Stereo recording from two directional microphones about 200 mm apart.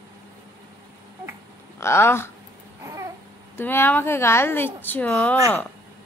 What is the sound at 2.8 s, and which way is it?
Babbling, 15° right (ahead or behind).